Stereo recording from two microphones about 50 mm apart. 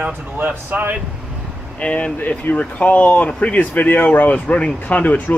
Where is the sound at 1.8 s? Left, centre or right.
Left.